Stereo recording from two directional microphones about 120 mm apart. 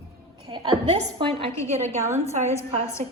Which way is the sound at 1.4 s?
65° right (ahead or behind).